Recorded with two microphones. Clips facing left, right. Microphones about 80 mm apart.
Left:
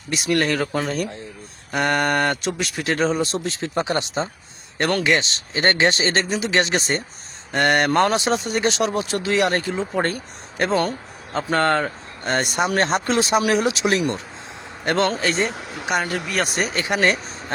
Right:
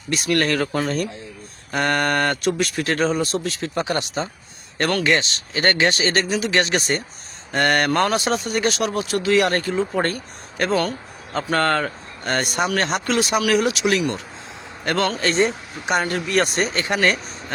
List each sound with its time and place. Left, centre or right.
0.1 s speech: centre
5.2 s speech: left
9.7 s speech: centre
10.6 s speech: left
15.2 s speech: centre